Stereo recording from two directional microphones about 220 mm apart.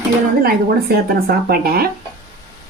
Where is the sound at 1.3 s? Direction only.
45° right (ahead or behind).